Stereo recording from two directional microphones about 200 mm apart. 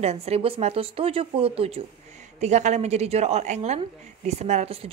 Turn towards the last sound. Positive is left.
turn(degrees=-35)  # may be behind; listen again after turning